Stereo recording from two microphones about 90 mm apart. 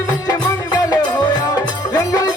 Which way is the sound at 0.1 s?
45° left (ahead or behind).